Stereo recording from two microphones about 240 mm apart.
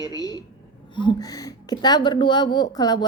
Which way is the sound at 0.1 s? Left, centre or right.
Centre.